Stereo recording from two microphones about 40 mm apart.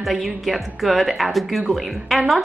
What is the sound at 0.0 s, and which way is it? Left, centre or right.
A woman's voice, centre.